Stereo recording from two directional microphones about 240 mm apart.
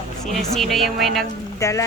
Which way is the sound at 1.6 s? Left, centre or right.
Centre.